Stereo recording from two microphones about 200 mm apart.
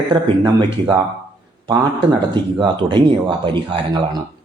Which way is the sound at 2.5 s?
25° right (ahead or behind).